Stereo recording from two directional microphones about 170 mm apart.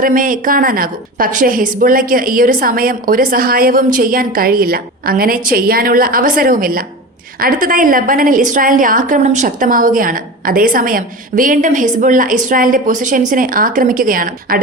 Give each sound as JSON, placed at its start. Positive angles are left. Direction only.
{"t": 0.0, "sound": "a woman's voice", "side_deg": -55}